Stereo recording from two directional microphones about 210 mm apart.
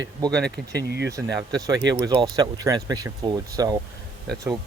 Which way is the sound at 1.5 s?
15° right (ahead or behind).